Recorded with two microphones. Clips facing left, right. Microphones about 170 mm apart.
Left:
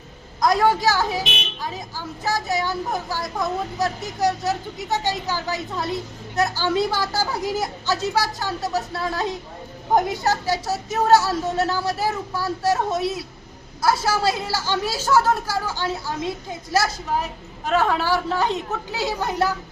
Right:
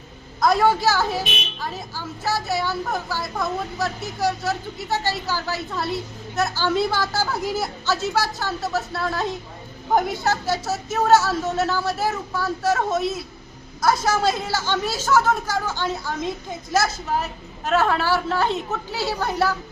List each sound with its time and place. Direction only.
0.7 s a woman's voice: 15° left (ahead or behind)